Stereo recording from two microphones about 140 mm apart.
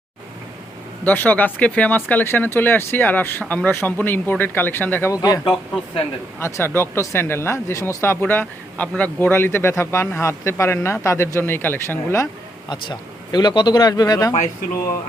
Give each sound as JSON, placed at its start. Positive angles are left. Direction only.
{"t": 1.0, "sound": "speech", "side_deg": 10}
{"t": 5.1, "sound": "a man's voice", "side_deg": 25}